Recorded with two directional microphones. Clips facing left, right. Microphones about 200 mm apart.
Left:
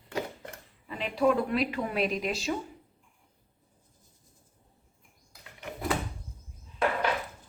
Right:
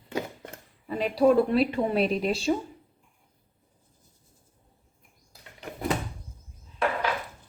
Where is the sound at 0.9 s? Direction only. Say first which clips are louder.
Right 5 dB; 40° right (ahead or behind).